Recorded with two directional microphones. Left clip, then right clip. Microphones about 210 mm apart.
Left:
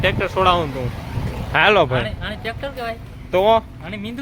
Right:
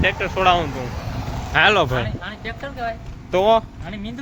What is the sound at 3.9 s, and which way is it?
Speech, 55° left (ahead or behind).